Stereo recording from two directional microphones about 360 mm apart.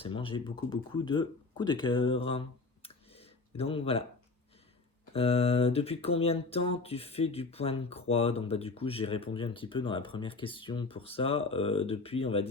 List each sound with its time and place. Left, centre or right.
0.0 s speech: centre
2.8 s clicking: centre
5.1 s speech: centre